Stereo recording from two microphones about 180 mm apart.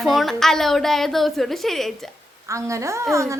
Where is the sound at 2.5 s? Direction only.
15° right (ahead or behind).